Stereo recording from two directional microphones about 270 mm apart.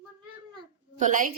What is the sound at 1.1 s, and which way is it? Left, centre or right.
Speech, right.